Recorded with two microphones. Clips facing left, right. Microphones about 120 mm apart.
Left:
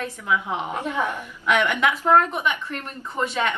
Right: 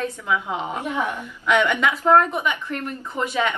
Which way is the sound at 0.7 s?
15° right (ahead or behind).